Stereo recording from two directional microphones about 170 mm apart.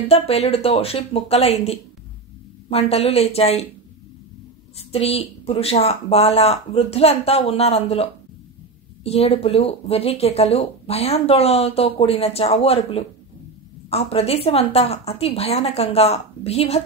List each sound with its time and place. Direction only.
0.1 s speech: 35° left (ahead or behind)
4.7 s speech: 35° left (ahead or behind)